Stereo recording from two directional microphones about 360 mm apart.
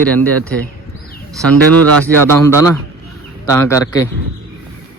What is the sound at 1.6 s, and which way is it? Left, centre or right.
Speech, right.